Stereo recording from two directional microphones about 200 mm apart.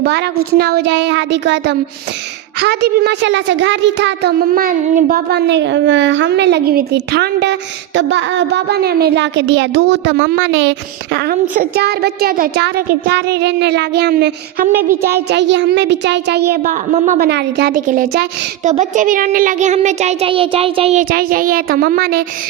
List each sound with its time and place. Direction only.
0.0 s a child's voice: 55° right (ahead or behind)
14.7 s a sound: 10° right (ahead or behind)
15.3 s a child's voice: 60° right (ahead or behind); by 21.0 s 30° right (ahead or behind)
21.0 s speech: 45° right (ahead or behind)